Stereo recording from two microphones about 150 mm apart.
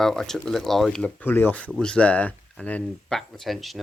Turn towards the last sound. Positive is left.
turn(degrees=0)  # may be behind; listen again after turning